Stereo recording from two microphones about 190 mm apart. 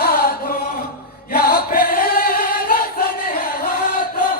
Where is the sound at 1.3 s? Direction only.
55° left (ahead or behind).